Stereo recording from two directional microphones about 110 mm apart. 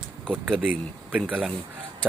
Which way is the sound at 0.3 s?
10° right (ahead or behind).